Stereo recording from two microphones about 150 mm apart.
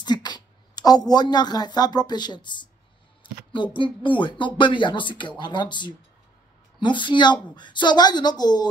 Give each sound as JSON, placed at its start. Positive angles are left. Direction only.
{"t": 0.0, "sound": "a woman's voice", "side_deg": 30}